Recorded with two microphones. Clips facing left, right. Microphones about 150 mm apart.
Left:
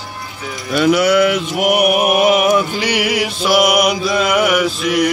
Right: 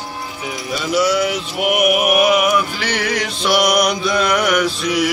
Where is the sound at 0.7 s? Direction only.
60° left (ahead or behind).